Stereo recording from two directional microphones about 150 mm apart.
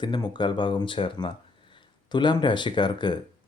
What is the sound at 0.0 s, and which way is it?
Speech, 30° left (ahead or behind).